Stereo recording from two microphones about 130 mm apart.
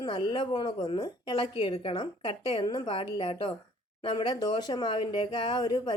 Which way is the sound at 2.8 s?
45° left (ahead or behind).